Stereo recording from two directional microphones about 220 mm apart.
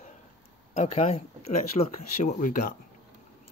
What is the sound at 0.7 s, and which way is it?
Speech, 30° left (ahead or behind).